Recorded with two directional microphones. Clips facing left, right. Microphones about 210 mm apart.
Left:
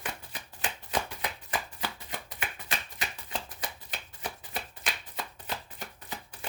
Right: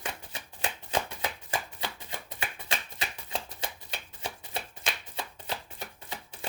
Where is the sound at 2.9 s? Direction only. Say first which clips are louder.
Right 1 dB; 25° right (ahead or behind).